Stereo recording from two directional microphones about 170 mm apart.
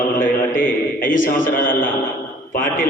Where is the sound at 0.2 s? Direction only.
55° left (ahead or behind).